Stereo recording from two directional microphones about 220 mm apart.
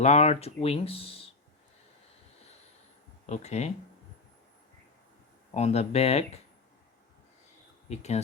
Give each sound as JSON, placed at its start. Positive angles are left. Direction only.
{"t": 0.0, "sound": "speech", "side_deg": 30}
{"t": 3.2, "sound": "speech", "side_deg": 30}
{"t": 5.5, "sound": "speech", "side_deg": 30}
{"t": 7.9, "sound": "speech", "side_deg": 30}